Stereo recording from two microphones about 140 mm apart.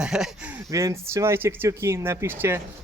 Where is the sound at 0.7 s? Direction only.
20° right (ahead or behind).